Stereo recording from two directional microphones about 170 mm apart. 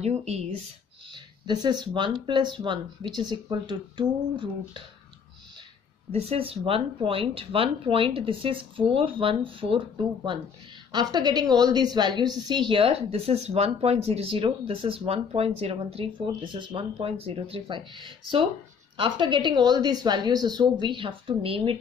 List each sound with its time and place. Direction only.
0.0 s a woman's voice: 40° right (ahead or behind)
1.1 s speech: 25° right (ahead or behind)
6.1 s a woman's voice: 35° right (ahead or behind)